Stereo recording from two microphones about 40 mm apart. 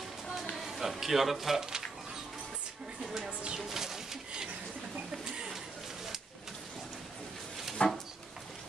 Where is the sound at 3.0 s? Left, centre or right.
Centre.